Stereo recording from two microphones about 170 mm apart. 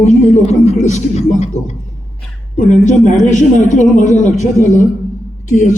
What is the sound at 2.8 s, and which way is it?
A man's voice, 45° left (ahead or behind).